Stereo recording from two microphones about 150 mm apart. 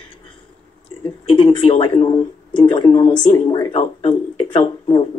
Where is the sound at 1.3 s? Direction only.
35° left (ahead or behind).